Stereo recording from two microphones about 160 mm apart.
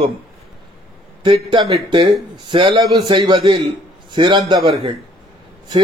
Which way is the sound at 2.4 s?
30° right (ahead or behind).